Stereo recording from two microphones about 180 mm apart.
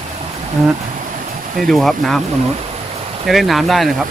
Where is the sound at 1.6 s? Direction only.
Centre (ahead or behind).